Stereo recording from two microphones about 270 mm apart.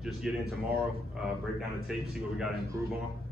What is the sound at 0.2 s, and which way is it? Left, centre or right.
Speech, centre.